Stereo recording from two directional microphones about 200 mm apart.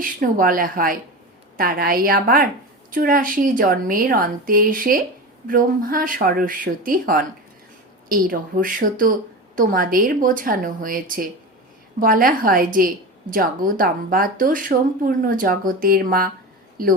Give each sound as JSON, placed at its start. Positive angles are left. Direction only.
{"t": 0.0, "sound": "speech", "side_deg": -45}